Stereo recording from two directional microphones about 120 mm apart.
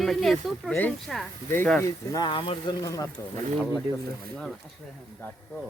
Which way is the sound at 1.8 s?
35° left (ahead or behind).